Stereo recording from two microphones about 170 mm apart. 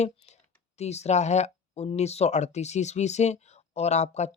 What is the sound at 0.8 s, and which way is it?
Speech, 40° left (ahead or behind).